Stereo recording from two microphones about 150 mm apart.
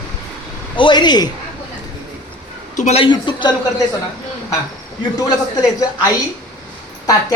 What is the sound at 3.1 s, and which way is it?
Speech, 30° left (ahead or behind).